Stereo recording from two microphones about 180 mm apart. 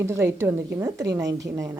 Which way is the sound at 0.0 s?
15° right (ahead or behind).